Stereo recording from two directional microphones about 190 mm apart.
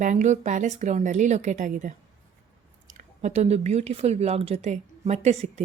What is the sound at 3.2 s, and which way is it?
Speech, 35° right (ahead or behind).